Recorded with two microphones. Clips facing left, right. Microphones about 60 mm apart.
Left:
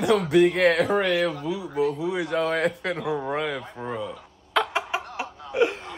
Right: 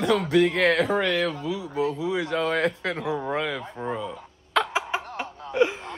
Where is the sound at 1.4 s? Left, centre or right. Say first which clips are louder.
Left 1 dB; centre.